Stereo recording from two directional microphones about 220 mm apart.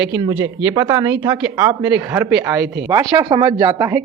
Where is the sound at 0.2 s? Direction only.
20° right (ahead or behind).